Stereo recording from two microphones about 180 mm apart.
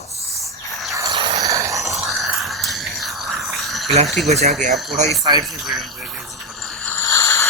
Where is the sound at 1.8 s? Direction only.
Centre (ahead or behind).